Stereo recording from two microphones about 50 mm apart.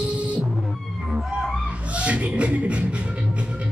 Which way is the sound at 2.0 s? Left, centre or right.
Right.